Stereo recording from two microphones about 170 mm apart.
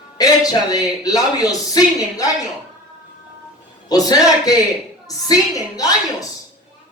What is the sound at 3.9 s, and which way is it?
A man's voice, 20° left (ahead or behind).